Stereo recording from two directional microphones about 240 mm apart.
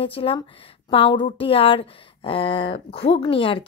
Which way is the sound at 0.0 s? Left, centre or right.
Left.